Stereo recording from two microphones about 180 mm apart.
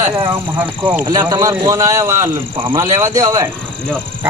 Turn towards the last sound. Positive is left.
turn(degrees=-20)  # may be behind; listen again after turning